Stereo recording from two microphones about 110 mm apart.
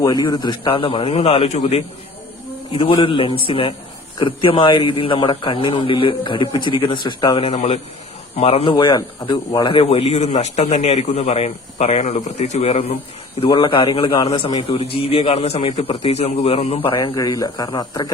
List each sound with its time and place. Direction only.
0.0 s a man's voice: 35° left (ahead or behind); by 1.8 s 65° left (ahead or behind)
2.7 s a man's voice: 50° left (ahead or behind)
7.4 s a man's voice: 80° left
8.4 s a man's voice: 65° left (ahead or behind)
9.2 s a man's voice: 40° left (ahead or behind)
9.7 s a man's voice: 60° left (ahead or behind)
13.5 s a man's voice: 50° left (ahead or behind)
17.0 s speech: 35° left (ahead or behind)